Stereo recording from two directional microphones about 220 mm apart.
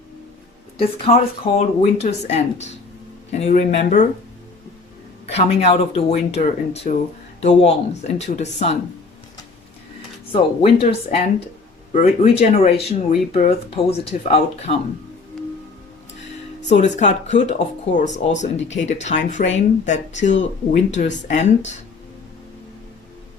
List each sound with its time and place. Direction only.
0.8 s speech: 25° left (ahead or behind)
5.3 s speech: 30° left (ahead or behind)
10.3 s speech: 25° left (ahead or behind)
16.6 s speech: 30° left (ahead or behind)